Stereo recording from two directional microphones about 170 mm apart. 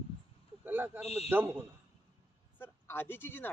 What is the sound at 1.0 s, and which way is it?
Speech, 40° left (ahead or behind).